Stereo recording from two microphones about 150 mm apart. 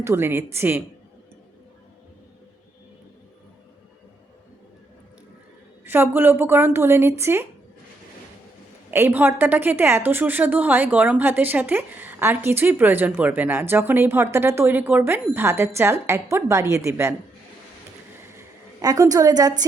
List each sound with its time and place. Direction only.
0.0 s speech: 15° right (ahead or behind)
5.8 s speech: 15° right (ahead or behind)
8.9 s speech: 15° right (ahead or behind)
18.3 s a woman's voice: 25° right (ahead or behind)